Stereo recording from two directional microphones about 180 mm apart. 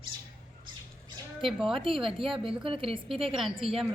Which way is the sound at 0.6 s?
25° right (ahead or behind).